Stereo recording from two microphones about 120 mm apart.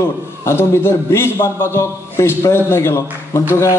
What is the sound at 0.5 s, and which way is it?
A man's voice, 20° left (ahead or behind).